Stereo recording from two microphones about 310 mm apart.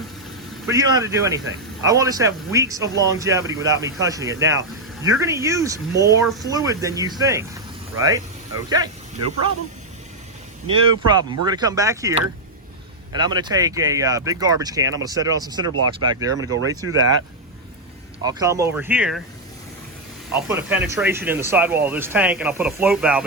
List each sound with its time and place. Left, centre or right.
0.7 s speech: centre
6.4 s speech: centre
10.7 s speech: centre
13.1 s speech: centre
15.7 s speech: right
18.2 s speech: centre
20.5 s speech: centre